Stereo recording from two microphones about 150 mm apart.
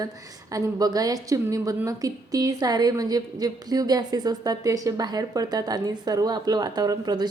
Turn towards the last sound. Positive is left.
turn(degrees=-25)  # may be behind; listen again after turning